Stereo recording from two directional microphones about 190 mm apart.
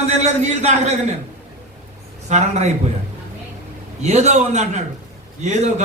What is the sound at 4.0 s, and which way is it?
A man's voice, 35° right (ahead or behind).